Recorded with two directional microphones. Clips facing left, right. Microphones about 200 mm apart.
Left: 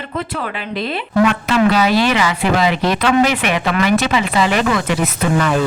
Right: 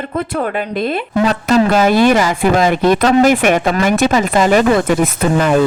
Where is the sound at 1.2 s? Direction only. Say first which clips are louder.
Right 3 dB; 40° right (ahead or behind).